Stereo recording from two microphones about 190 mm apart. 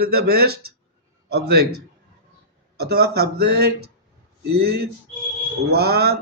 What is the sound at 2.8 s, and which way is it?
A man's voice, 55° right (ahead or behind).